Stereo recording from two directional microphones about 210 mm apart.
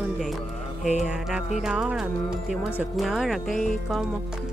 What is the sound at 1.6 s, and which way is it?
Speech, 5° right (ahead or behind).